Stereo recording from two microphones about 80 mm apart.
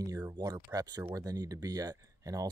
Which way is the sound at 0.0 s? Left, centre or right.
Right.